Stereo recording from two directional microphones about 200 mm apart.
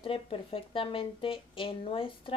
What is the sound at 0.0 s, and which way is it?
Speech, 25° left (ahead or behind).